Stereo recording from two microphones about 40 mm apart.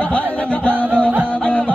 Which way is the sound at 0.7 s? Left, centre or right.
Right.